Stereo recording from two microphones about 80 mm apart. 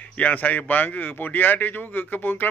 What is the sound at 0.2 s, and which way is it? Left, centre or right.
A man's voice, centre.